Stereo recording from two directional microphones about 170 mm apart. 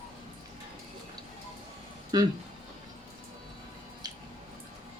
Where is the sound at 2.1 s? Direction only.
25° right (ahead or behind).